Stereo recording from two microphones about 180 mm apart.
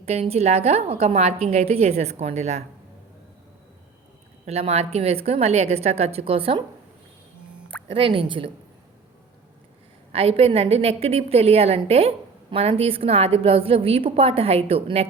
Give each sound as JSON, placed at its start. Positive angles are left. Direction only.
{"t": 0.0, "sound": "a woman's voice", "side_deg": -35}
{"t": 4.4, "sound": "a woman's voice", "side_deg": -35}
{"t": 7.9, "sound": "speech", "side_deg": -30}
{"t": 10.1, "sound": "a woman's voice", "side_deg": -35}